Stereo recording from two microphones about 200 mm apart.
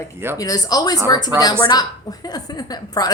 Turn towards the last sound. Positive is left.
turn(degrees=20)  # may be behind; listen again after turning